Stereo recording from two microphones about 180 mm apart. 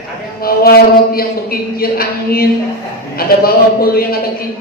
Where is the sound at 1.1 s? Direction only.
55° left (ahead or behind).